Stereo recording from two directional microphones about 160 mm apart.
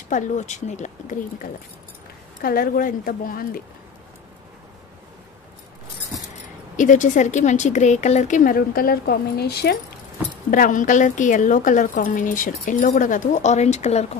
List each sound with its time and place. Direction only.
0.1 s a woman's voice: 50° left (ahead or behind)
2.4 s a woman's voice: 65° left (ahead or behind)
6.8 s a woman's voice: 50° left (ahead or behind); by 9.8 s 90° left
10.5 s a woman's voice: 55° left (ahead or behind)